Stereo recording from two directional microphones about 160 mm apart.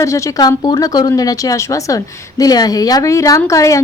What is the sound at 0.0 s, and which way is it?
Speech, 20° left (ahead or behind).